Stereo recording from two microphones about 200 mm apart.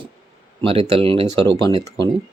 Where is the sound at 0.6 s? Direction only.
25° right (ahead or behind).